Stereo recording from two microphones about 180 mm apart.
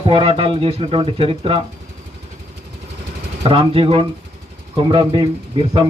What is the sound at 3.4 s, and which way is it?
Speech, 30° right (ahead or behind).